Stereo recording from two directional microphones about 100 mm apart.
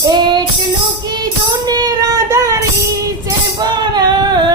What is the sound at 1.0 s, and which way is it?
Child singing, 45° right (ahead or behind).